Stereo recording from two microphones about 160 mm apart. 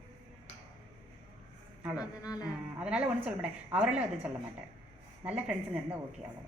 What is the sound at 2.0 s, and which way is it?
Music, 20° left (ahead or behind).